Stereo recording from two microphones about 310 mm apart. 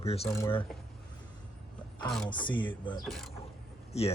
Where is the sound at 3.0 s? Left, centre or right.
Centre.